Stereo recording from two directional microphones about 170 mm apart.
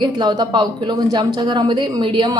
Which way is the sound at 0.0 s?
25° right (ahead or behind).